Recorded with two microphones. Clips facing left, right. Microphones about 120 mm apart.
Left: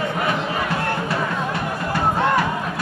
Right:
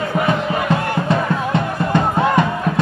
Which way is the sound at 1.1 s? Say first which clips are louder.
Right 5 dB; 20° right (ahead or behind).